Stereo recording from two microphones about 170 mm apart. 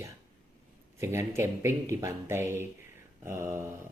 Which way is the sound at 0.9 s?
15° right (ahead or behind).